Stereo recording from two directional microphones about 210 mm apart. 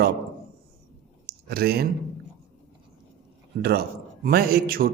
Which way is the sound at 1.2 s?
50° right (ahead or behind).